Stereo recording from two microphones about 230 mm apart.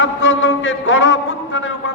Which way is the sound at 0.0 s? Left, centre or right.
Left.